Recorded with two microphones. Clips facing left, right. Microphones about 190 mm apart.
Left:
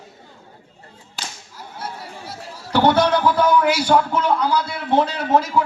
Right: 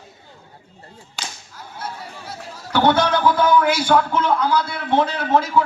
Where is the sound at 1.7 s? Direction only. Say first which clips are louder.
Even; 10° left (ahead or behind).